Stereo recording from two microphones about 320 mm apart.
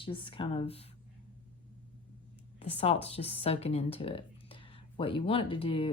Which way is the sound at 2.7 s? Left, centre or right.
Centre.